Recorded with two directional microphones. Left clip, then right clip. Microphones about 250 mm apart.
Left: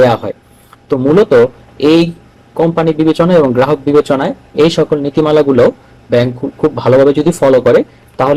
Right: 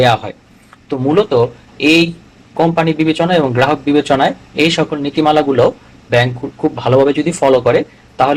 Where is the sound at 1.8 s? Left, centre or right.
Left.